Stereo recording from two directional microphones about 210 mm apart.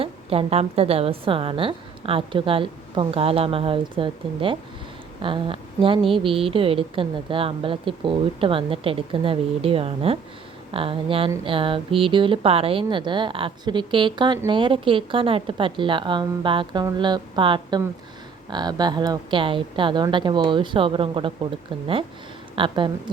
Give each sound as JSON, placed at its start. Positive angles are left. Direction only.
{"t": 0.0, "sound": "a woman's voice", "side_deg": -25}
{"t": 22.5, "sound": "a woman's voice", "side_deg": -25}